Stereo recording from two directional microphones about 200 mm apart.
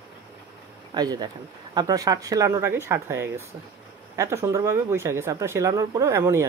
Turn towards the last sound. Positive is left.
turn(degrees=-15)  # may be behind; listen again after turning